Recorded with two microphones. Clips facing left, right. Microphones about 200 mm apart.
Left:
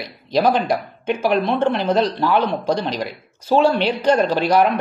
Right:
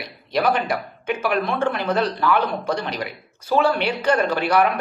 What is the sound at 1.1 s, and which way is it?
Speech, 30° left (ahead or behind).